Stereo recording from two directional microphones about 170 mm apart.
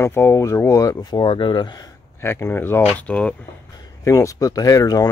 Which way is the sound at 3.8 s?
20° left (ahead or behind).